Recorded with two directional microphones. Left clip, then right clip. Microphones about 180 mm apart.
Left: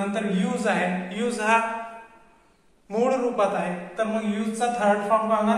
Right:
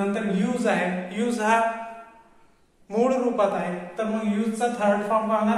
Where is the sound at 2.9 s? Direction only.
15° right (ahead or behind).